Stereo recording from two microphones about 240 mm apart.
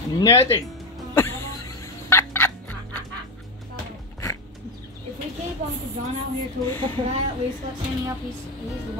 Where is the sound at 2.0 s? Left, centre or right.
Centre.